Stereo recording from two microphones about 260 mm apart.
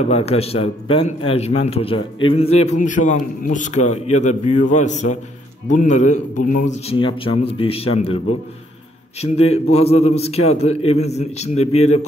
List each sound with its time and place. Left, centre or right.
0.0 s speech: left
9.2 s speech: left